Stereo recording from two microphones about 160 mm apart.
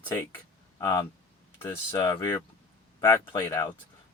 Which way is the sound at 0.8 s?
20° left (ahead or behind).